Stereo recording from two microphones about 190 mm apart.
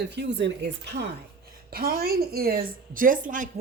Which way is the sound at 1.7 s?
50° right (ahead or behind).